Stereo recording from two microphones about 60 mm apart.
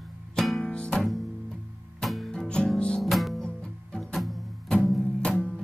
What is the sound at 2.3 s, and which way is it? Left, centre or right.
Music, centre.